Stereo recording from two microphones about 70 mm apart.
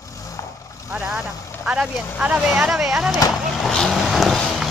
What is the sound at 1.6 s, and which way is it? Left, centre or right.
Speech, centre.